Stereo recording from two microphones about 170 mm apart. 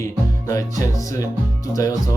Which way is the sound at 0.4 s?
20° left (ahead or behind).